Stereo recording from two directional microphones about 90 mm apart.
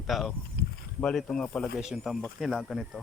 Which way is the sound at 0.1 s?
Centre (ahead or behind).